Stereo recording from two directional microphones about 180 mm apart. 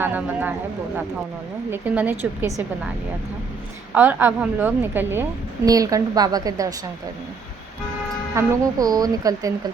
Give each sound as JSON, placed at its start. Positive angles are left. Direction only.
{"t": 0.0, "sound": "a woman's voice", "side_deg": -10}
{"t": 1.7, "sound": "a woman's voice", "side_deg": -10}
{"t": 3.9, "sound": "a woman's voice", "side_deg": -10}
{"t": 8.4, "sound": "a woman's voice", "side_deg": -20}